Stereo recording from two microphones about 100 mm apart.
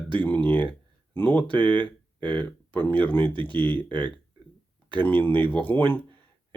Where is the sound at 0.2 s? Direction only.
15° left (ahead or behind).